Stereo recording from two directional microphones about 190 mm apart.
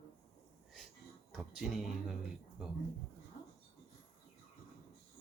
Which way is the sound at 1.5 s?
Centre (ahead or behind).